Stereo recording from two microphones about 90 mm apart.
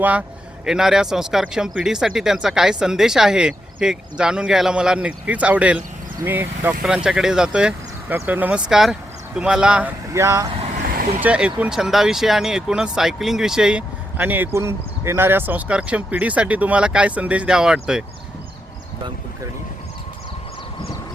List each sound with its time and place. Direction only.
0.0 s speech: 15° right (ahead or behind)
0.6 s speech: 5° right (ahead or behind)
6.2 s speech: 25° right (ahead or behind)
6.8 s speech: 10° right (ahead or behind)
8.7 s speech: 5° right (ahead or behind)
10.1 s speech: 35° right (ahead or behind)
11.2 s speech: 15° right (ahead or behind)
14.2 s speech: 20° right (ahead or behind)